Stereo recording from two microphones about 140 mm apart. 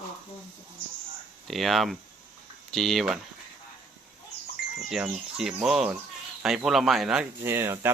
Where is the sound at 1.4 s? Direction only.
Centre (ahead or behind).